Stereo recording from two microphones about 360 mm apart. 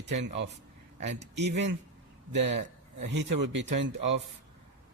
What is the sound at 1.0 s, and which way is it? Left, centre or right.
Speech, right.